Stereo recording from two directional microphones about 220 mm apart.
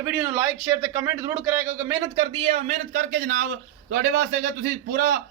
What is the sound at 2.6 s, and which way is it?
A man's voice, 40° right (ahead or behind).